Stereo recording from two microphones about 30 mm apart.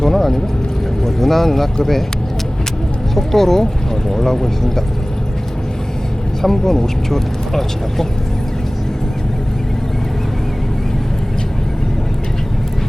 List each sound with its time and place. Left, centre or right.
0.0 s vehicle: centre
1.0 s speech: centre
3.2 s speech: centre
6.4 s speech: centre